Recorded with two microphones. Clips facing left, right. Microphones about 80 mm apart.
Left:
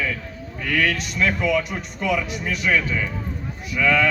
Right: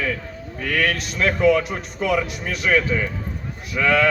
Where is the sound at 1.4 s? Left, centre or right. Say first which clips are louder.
Right 5 dB; right.